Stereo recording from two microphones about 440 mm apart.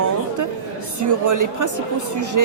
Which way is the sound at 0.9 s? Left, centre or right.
Right.